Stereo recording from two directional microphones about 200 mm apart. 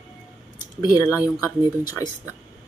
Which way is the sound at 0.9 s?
15° left (ahead or behind).